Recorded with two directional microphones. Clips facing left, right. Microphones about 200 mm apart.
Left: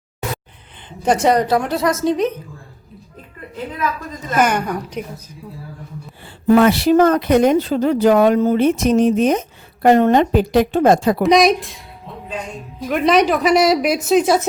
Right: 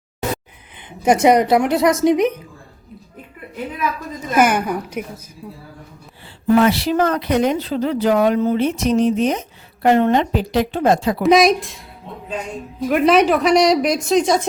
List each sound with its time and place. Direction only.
0.9 s a woman's voice: 10° right (ahead or behind)
4.3 s a woman's voice: 10° right (ahead or behind)
6.6 s speech: 50° left (ahead or behind)
11.2 s a woman's voice: centre (ahead or behind)
12.8 s a woman's voice: 5° right (ahead or behind)